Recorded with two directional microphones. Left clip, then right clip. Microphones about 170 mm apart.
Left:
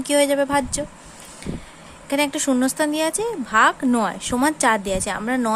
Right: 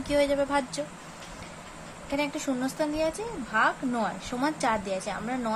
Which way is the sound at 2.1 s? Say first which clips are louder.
Left 9 dB; 55° left (ahead or behind).